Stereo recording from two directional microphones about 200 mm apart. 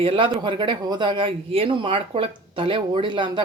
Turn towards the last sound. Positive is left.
turn(degrees=-25)  # may be behind; listen again after turning